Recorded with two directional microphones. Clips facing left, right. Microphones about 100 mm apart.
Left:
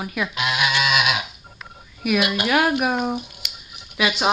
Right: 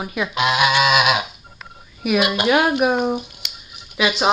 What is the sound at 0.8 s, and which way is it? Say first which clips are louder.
Goose: right 5 dB; 40° right (ahead or behind).